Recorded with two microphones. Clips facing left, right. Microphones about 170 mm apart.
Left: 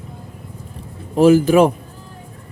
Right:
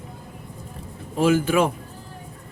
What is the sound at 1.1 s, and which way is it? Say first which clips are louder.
Speech: left 8 dB; 35° left (ahead or behind).